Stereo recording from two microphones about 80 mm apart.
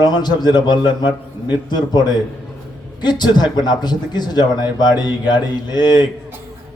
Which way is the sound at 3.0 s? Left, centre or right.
Left.